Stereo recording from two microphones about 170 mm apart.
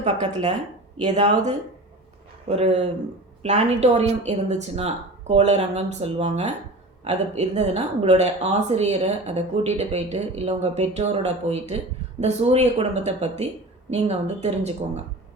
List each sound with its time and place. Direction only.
1.1 s speech: 40° right (ahead or behind)